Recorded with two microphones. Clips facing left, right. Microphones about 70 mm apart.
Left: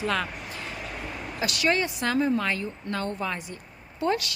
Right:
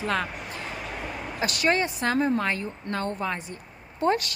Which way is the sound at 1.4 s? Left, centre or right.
Right.